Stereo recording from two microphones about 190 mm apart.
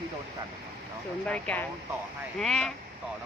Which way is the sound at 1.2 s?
5° left (ahead or behind).